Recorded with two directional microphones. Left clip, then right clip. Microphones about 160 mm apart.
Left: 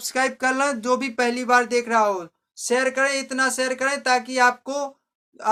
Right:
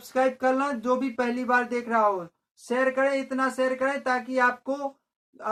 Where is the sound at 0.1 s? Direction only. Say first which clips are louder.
Left 1 dB; 35° left (ahead or behind).